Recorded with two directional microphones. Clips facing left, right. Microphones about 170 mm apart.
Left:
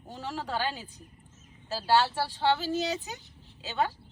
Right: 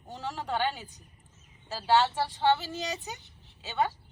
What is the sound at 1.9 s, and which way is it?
Speech, 15° right (ahead or behind).